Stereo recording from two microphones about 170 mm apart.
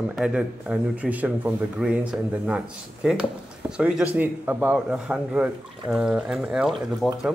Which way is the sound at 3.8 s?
5° right (ahead or behind).